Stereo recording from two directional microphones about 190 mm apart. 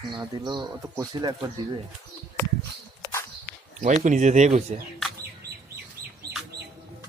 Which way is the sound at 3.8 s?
40° right (ahead or behind).